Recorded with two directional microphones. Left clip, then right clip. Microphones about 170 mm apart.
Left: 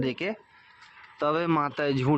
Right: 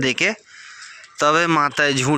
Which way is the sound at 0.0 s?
15° right (ahead or behind).